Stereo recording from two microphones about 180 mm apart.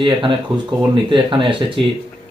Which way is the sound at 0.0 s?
30° right (ahead or behind).